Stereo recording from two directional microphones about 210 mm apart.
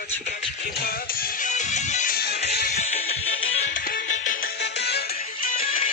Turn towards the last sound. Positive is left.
turn(degrees=40)  # may be behind; listen again after turning